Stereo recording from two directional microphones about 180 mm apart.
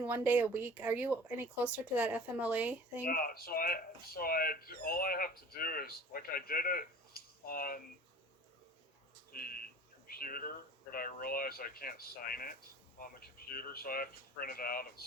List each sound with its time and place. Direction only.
0.0 s speech: 10° right (ahead or behind)
3.0 s speech: 50° left (ahead or behind)
9.3 s a sound: 55° left (ahead or behind)
10.9 s speech: 55° left (ahead or behind)